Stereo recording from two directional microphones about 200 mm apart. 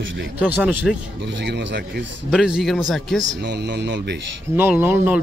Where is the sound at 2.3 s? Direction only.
5° right (ahead or behind).